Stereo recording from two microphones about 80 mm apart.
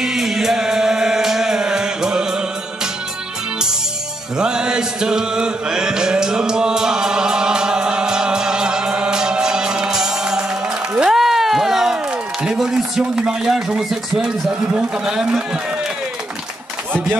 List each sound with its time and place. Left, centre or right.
0.0 s music: centre
4.4 s chant: centre
11.0 s a sound: centre
12.4 s a man's voice: centre